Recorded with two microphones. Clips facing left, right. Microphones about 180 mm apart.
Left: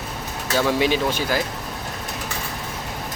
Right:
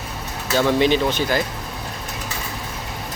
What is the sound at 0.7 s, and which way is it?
Speech, 5° left (ahead or behind).